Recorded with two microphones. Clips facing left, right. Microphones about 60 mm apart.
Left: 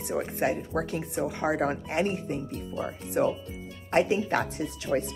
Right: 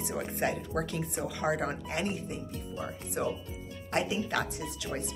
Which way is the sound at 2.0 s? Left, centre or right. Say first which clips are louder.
Left 5 dB; left.